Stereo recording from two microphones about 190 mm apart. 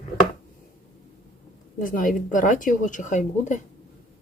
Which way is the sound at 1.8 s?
45° left (ahead or behind).